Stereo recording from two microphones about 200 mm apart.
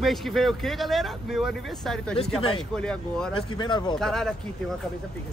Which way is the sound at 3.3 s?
25° left (ahead or behind).